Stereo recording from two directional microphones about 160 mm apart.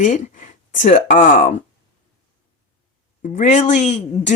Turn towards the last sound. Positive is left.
turn(degrees=45)  # may be behind; listen again after turning